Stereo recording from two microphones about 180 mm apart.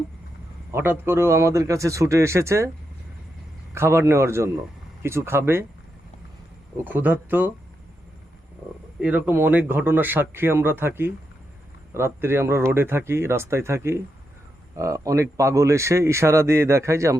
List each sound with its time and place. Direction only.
0.7 s a man's voice: 15° right (ahead or behind)
3.8 s a man's voice: 15° right (ahead or behind)
6.8 s a man's voice: 10° right (ahead or behind)
9.0 s a man's voice: 10° right (ahead or behind)